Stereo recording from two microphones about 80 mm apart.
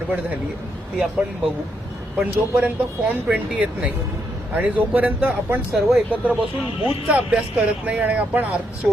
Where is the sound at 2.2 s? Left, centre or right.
Centre.